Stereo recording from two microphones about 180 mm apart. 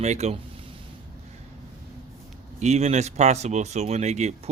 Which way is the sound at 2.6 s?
40° right (ahead or behind).